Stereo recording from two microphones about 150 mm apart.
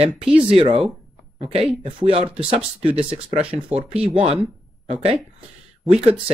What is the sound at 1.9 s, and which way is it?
Speech, 35° right (ahead or behind).